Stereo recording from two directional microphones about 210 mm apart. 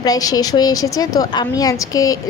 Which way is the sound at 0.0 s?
15° left (ahead or behind).